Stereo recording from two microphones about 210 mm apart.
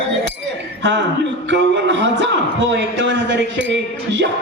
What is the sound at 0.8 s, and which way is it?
A man's voice, 60° right (ahead or behind).